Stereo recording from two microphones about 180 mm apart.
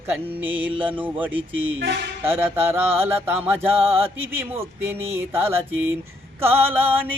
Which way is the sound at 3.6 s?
30° right (ahead or behind).